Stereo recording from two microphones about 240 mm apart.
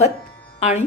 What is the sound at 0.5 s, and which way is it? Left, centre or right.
Speech, left.